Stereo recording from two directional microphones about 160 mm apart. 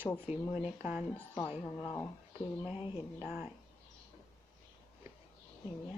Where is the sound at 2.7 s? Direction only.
35° left (ahead or behind).